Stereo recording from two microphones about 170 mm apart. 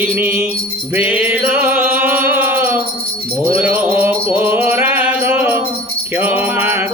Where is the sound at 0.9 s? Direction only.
10° right (ahead or behind).